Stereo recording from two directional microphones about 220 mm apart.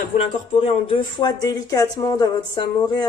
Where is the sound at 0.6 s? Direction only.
25° left (ahead or behind).